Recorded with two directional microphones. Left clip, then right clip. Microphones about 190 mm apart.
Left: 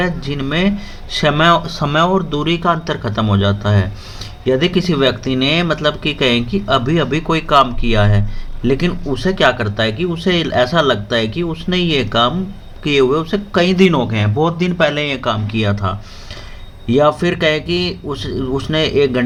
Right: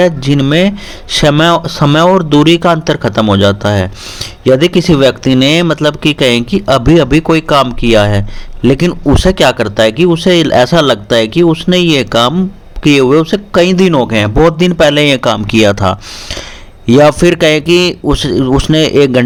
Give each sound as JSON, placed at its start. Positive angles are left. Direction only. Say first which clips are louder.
{"t": 0.0, "sound": "a man's voice", "louder": "right 10 dB", "side_deg": -50}